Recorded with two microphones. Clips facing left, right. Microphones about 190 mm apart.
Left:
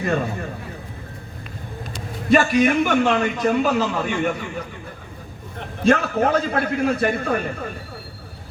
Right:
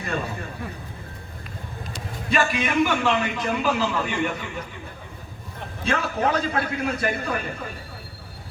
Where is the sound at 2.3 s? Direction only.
40° left (ahead or behind).